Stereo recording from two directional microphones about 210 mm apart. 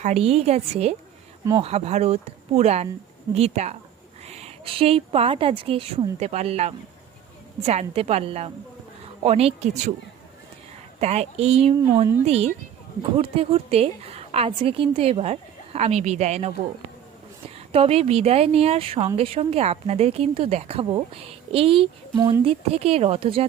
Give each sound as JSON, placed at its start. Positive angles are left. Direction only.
{"t": 0.0, "sound": "a woman's voice", "side_deg": -30}
{"t": 11.0, "sound": "a woman's voice", "side_deg": -30}
{"t": 17.7, "sound": "a woman's voice", "side_deg": -30}